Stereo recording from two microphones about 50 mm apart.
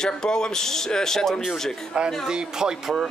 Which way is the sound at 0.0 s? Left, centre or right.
Centre.